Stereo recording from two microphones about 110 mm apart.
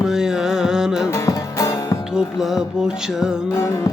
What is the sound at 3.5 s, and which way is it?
Music, 25° left (ahead or behind).